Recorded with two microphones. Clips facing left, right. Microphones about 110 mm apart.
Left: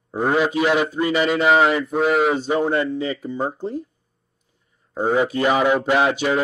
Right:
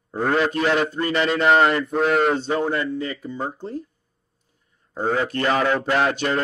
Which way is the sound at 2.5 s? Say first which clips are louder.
Left 3 dB; 20° left (ahead or behind).